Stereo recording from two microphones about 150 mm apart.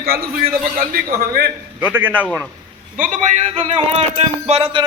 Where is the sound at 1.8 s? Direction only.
15° right (ahead or behind).